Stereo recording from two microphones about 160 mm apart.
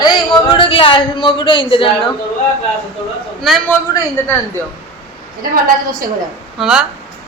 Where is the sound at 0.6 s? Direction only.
35° left (ahead or behind).